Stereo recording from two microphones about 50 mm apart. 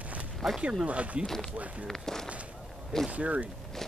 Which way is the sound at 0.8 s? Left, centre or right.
Right.